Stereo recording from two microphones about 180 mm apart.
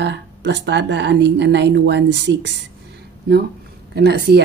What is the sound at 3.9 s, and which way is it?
Speech, 65° right (ahead or behind).